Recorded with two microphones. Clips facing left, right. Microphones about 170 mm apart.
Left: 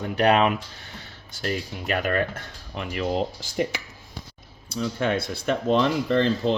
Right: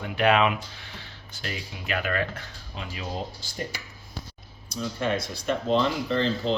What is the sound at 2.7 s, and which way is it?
Speech, 65° left (ahead or behind).